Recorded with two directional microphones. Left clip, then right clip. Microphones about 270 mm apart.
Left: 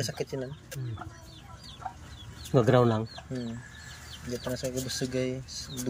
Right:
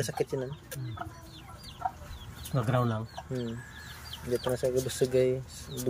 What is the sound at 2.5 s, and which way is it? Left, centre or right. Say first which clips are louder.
Speech: left 8 dB; centre.